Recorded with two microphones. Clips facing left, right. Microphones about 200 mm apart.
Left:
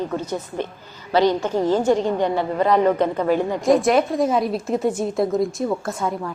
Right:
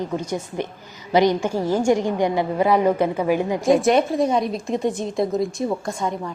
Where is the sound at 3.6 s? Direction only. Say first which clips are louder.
Even; centre (ahead or behind).